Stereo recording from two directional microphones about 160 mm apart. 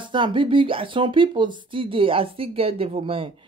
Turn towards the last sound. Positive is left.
turn(degrees=-35)  # may be behind; listen again after turning